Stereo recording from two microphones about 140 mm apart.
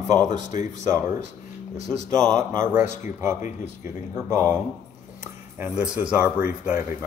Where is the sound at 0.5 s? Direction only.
65° left (ahead or behind).